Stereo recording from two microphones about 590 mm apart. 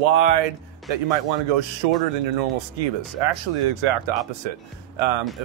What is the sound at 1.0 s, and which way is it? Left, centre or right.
Speech, right.